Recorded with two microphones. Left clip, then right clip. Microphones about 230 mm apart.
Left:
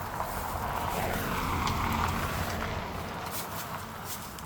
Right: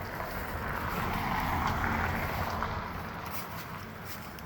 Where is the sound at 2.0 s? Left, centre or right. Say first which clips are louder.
Left 1 dB; left.